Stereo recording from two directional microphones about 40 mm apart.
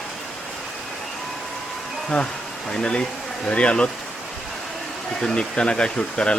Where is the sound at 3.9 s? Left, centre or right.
Centre.